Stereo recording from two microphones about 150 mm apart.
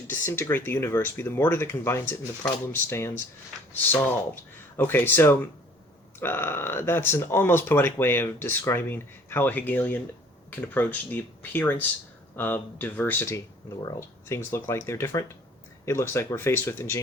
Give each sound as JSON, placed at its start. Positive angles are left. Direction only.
{"t": 0.1, "sound": "speech", "side_deg": 15}